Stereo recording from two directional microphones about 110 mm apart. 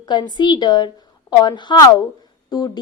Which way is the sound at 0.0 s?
40° left (ahead or behind).